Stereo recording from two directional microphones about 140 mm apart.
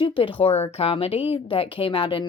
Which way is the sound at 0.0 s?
40° left (ahead or behind).